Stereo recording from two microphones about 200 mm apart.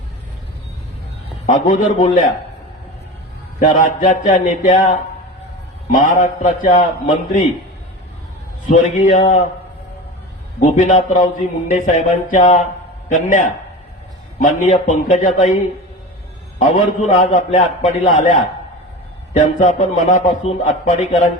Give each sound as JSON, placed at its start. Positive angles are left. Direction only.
{"t": 1.5, "sound": "a man's voice", "side_deg": 40}
{"t": 3.6, "sound": "a man's voice", "side_deg": 40}
{"t": 8.7, "sound": "a man's voice", "side_deg": 35}
{"t": 10.6, "sound": "a man's voice", "side_deg": 35}